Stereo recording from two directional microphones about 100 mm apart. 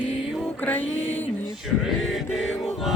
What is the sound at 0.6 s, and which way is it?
Music, 15° left (ahead or behind).